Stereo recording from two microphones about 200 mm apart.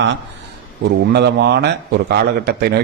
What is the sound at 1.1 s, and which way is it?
A man's voice, 55° right (ahead or behind).